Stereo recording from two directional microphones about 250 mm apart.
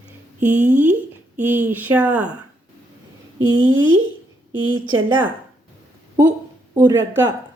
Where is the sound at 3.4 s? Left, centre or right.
Right.